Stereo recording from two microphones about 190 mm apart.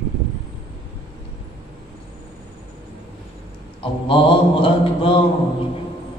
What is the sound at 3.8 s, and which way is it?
Mantra, 30° left (ahead or behind).